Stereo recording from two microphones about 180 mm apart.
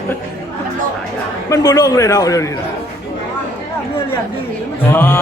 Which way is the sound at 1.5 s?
20° left (ahead or behind).